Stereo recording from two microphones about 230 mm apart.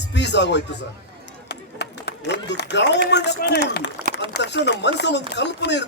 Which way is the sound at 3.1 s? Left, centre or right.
Left.